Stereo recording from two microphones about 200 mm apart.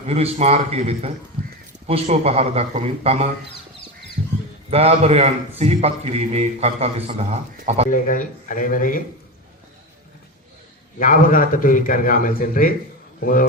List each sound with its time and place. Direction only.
0.1 s a man's voice: 30° right (ahead or behind)
4.7 s a man's voice: 30° right (ahead or behind)
7.9 s a man's voice: 40° left (ahead or behind)
11.0 s a man's voice: 45° left (ahead or behind)